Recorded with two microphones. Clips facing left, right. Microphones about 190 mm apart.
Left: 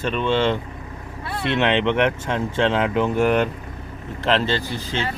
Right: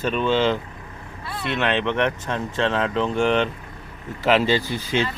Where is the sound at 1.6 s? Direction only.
15° left (ahead or behind); by 5.1 s 15° right (ahead or behind).